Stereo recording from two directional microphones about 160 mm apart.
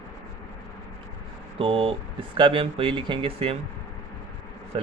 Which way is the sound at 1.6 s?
35° right (ahead or behind).